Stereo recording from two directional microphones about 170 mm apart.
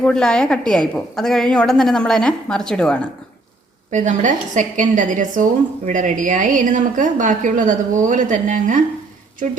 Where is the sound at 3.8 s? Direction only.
45° right (ahead or behind).